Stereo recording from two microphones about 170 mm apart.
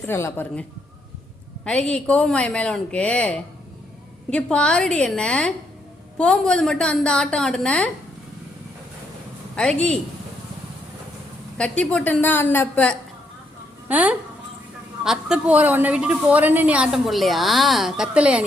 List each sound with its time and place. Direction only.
0.1 s a woman's voice: 15° left (ahead or behind)
1.6 s a woman's voice: 5° left (ahead or behind)
9.6 s a woman's voice: 5° left (ahead or behind)
11.5 s a woman's voice: 5° left (ahead or behind)
13.8 s a woman's voice: 10° right (ahead or behind)